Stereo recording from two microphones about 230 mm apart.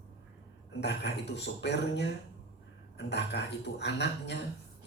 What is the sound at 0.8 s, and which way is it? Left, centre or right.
Speech, left.